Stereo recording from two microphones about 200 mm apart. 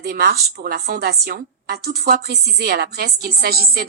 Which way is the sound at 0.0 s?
55° right (ahead or behind).